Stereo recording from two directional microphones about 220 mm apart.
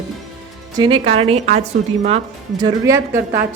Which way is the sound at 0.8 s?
20° right (ahead or behind).